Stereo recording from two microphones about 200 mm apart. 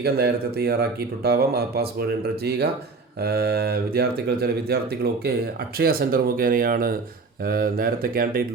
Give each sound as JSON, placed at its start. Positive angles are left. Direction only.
{"t": 0.0, "sound": "speech", "side_deg": -50}